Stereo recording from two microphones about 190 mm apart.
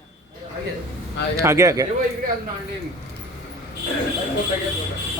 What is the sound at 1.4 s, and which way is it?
Speech, 15° right (ahead or behind).